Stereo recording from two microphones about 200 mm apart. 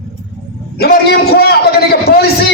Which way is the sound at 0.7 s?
55° left (ahead or behind).